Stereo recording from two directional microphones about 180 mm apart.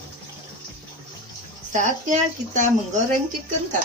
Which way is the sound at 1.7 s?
45° right (ahead or behind).